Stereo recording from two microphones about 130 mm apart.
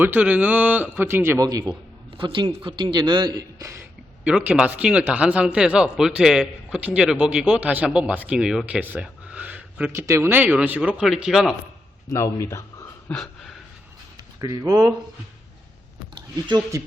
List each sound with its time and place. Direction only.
0.0 s a man's voice: 10° right (ahead or behind); by 1.7 s 30° right (ahead or behind)
2.1 s speech: 40° right (ahead or behind); by 3.8 s 25° right (ahead or behind)
4.2 s a man's voice: 10° right (ahead or behind)
12.1 s speech: 20° left (ahead or behind)
13.1 s a sound: 5° left (ahead or behind)
14.6 s speech: 30° right (ahead or behind)
16.1 s speech: 35° right (ahead or behind)